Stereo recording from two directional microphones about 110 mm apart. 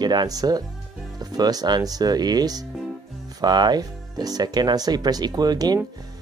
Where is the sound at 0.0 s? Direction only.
40° right (ahead or behind).